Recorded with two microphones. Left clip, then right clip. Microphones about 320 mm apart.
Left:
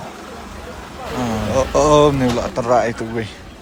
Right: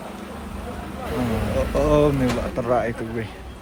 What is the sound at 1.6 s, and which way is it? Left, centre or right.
Speech, centre.